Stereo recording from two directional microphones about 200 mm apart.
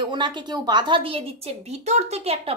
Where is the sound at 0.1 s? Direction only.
25° right (ahead or behind).